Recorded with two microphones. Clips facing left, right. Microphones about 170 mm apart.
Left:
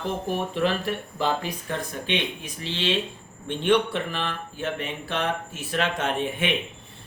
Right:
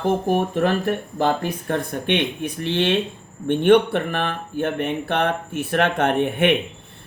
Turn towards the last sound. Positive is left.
turn(degrees=-60)  # may be behind; listen again after turning